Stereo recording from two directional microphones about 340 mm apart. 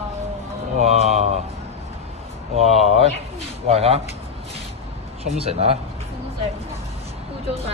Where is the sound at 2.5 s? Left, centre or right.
Centre.